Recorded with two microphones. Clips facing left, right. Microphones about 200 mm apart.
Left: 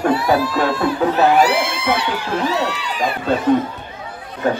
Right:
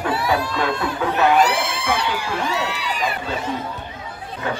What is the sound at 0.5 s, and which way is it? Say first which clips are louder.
Speech: left 5 dB; 35° left (ahead or behind).